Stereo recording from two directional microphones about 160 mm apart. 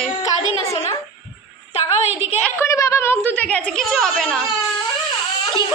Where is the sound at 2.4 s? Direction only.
15° left (ahead or behind).